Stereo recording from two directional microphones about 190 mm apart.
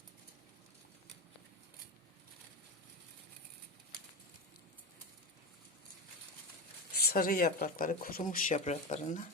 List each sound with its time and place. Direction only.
6.9 s speech: 55° left (ahead or behind)